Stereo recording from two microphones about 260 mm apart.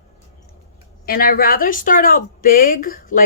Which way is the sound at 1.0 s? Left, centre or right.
Left.